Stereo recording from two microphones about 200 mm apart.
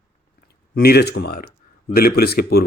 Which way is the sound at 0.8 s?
55° left (ahead or behind).